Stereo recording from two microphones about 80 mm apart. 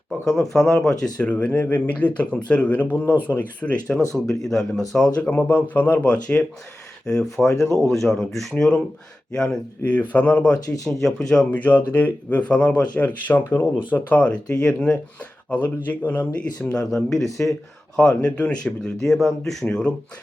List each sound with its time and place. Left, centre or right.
0.5 s speech: centre
1.2 s speech: centre
2.8 s speech: left
3.1 s speech: right
3.3 s speech: centre
13.4 s speech: left
13.9 s speech: centre
17.1 s speech: centre